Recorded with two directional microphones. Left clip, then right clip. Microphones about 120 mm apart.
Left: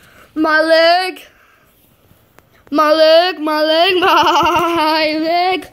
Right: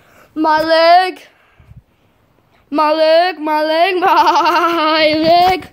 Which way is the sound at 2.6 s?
10° right (ahead or behind).